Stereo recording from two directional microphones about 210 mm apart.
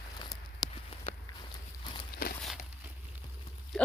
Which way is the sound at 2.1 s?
45° left (ahead or behind).